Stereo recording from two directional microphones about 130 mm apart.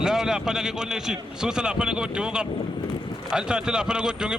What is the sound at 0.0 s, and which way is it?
A man's voice, 5° right (ahead or behind).